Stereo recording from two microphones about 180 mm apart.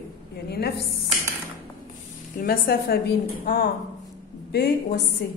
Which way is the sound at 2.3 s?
55° left (ahead or behind).